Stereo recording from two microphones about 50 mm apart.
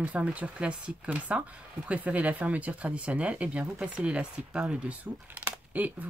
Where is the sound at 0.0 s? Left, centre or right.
Right.